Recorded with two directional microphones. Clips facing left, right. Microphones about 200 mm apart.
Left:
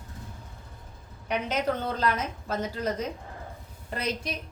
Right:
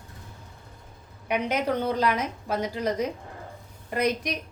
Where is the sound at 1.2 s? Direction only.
10° right (ahead or behind).